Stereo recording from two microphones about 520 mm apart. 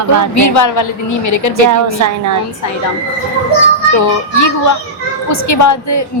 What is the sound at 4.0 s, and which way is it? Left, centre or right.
A woman's voice, left.